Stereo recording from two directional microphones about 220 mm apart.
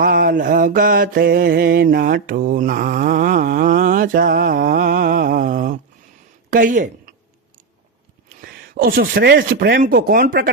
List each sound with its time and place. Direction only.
0.0 s mantra: 40° right (ahead or behind)
6.5 s speech: 40° right (ahead or behind)
8.4 s speech: 40° right (ahead or behind)